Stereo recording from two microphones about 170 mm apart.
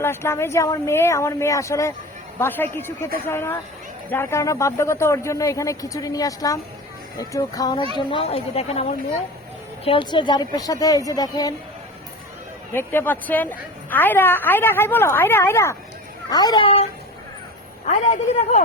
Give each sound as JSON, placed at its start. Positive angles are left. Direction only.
{"t": 0.0, "sound": "a woman's voice", "side_deg": 15}
{"t": 7.9, "sound": "speech", "side_deg": 30}
{"t": 12.7, "sound": "a woman's voice", "side_deg": 15}
{"t": 18.0, "sound": "a man's voice", "side_deg": 45}